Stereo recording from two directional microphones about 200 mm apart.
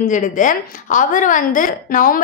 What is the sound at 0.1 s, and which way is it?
A woman's voice, 40° left (ahead or behind).